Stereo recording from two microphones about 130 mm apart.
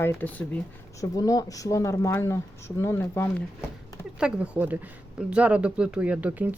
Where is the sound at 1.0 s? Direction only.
25° left (ahead or behind).